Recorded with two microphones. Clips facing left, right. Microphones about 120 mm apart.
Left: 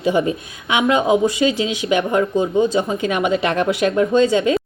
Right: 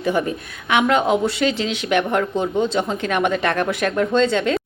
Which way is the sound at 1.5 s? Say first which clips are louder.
Left 2 dB; 60° right (ahead or behind).